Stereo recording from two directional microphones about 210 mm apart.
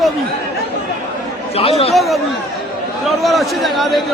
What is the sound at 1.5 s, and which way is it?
Speech, 25° left (ahead or behind).